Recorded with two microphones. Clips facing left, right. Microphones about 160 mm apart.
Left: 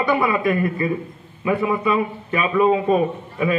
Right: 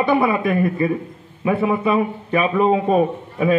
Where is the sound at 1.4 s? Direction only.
25° right (ahead or behind).